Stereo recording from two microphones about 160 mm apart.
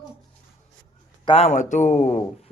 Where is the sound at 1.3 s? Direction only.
45° left (ahead or behind).